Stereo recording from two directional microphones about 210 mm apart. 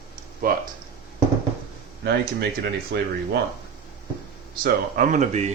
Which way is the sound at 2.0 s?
55° right (ahead or behind).